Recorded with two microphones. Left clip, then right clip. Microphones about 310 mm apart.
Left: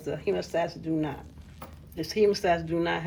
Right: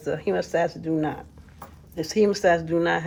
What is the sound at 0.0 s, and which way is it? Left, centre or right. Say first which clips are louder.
Speech: right 4 dB; right.